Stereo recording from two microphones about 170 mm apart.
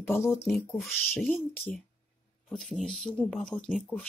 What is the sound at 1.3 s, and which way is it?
Speech, 10° left (ahead or behind).